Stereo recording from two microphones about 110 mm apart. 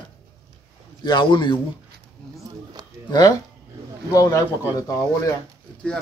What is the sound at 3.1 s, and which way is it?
A man's voice, 40° left (ahead or behind).